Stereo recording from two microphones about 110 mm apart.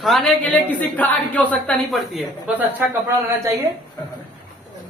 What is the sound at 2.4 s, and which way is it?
Speech, 15° right (ahead or behind).